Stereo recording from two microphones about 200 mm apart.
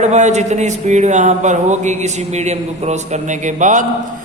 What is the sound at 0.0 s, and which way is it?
A man's voice, 35° right (ahead or behind).